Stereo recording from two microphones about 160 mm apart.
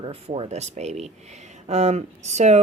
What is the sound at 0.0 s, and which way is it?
Speech, 35° right (ahead or behind).